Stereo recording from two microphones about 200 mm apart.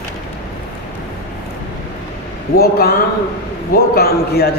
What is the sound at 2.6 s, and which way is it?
A man's voice, 50° left (ahead or behind).